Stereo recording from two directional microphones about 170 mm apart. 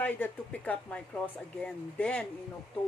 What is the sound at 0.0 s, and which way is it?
Speech, 10° left (ahead or behind).